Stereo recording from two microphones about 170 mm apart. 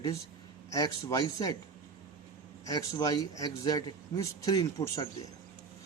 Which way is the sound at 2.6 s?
20° left (ahead or behind).